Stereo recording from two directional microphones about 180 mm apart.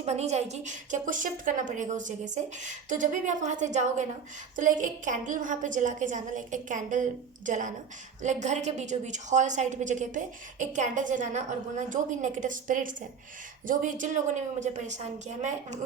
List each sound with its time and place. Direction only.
0.0 s a woman's voice: 35° right (ahead or behind)